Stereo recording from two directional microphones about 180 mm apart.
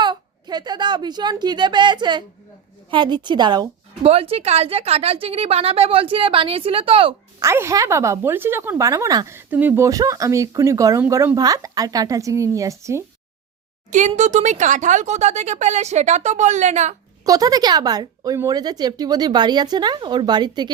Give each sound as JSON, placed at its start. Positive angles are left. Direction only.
{"t": 0.0, "sound": "a woman's voice", "side_deg": -25}
{"t": 7.4, "sound": "speech", "side_deg": -15}
{"t": 14.1, "sound": "speech", "side_deg": -40}
{"t": 17.2, "sound": "speech", "side_deg": -20}